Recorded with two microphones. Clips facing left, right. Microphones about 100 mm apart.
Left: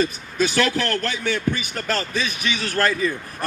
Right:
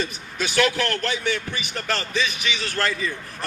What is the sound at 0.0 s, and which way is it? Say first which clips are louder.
A man's voice: left 6 dB; 40° left (ahead or behind).